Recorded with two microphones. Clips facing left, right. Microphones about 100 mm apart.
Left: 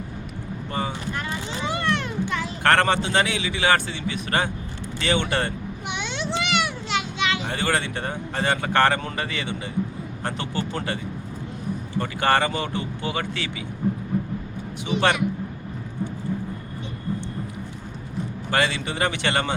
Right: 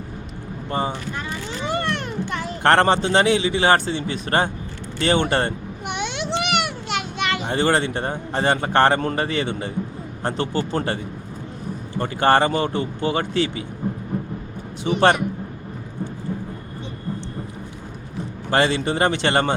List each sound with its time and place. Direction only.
0.7 s a man's voice: 30° right (ahead or behind)
1.6 s a sound: 50° right (ahead or behind)
2.6 s a man's voice: 30° right (ahead or behind)
5.9 s children playing: 60° right (ahead or behind)
7.4 s a man's voice: 30° right (ahead or behind)
14.8 s a man's voice: 40° right (ahead or behind)
18.5 s a man's voice: 35° right (ahead or behind)